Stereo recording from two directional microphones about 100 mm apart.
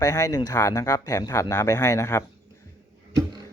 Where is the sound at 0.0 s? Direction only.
35° left (ahead or behind).